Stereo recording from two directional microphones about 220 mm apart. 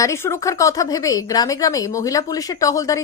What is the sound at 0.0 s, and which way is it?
Speech, 10° left (ahead or behind).